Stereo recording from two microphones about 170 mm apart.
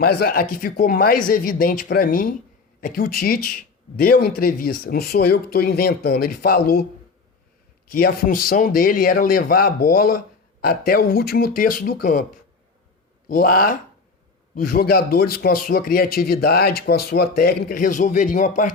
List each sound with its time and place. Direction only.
0.0 s speech: 65° left (ahead or behind)
7.9 s speech: 60° left (ahead or behind)
13.2 s speech: 60° left (ahead or behind)